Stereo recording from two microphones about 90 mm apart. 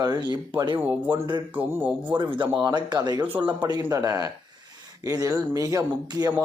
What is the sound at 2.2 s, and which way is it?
A man's voice, 60° right (ahead or behind).